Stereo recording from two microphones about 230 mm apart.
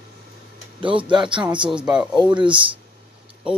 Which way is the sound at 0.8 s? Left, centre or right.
Right.